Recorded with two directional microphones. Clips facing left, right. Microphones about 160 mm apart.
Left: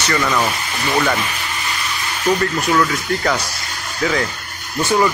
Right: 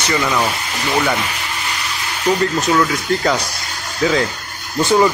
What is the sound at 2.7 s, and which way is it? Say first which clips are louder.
Speech: even; 10° right (ahead or behind).